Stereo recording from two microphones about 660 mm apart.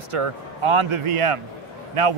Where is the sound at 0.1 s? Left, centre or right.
Right.